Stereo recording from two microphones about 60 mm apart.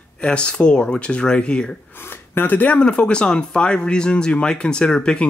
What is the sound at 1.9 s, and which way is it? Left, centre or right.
Speech, left.